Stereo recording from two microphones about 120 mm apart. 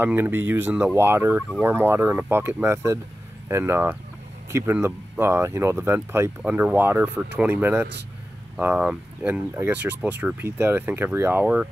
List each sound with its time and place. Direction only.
0.0 s speech: 20° right (ahead or behind)